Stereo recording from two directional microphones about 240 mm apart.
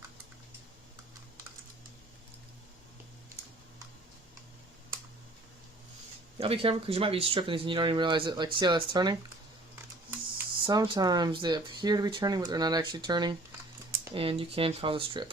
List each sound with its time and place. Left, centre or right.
6.4 s speech: right